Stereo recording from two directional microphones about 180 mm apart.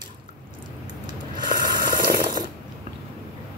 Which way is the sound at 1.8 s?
55° right (ahead or behind).